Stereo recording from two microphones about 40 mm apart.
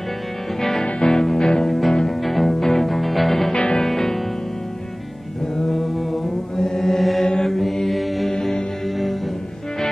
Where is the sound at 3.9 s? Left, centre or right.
Centre.